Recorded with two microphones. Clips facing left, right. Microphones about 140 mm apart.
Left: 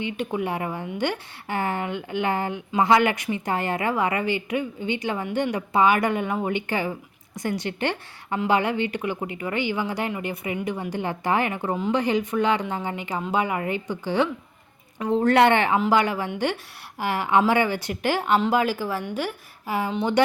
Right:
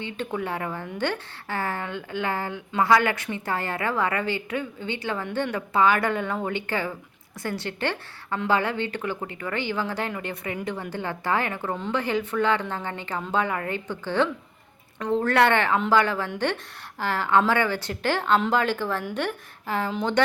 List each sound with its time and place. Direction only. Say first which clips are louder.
0.0 s speech: left 3 dB; 15° left (ahead or behind)